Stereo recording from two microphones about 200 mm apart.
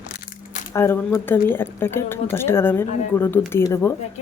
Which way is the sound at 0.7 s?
15° left (ahead or behind).